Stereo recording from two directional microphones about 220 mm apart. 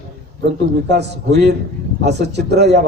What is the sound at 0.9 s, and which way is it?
A man's voice, 50° right (ahead or behind).